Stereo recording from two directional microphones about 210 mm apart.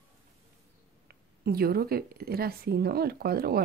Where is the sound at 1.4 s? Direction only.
45° right (ahead or behind).